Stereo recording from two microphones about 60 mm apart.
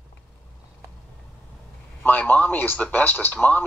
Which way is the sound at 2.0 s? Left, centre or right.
Left.